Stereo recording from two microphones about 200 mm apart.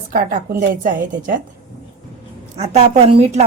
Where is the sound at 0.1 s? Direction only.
45° right (ahead or behind).